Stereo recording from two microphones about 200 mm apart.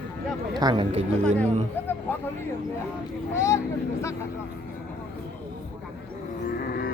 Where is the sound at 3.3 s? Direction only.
15° left (ahead or behind).